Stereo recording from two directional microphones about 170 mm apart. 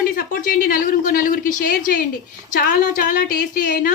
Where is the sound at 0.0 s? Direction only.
55° left (ahead or behind).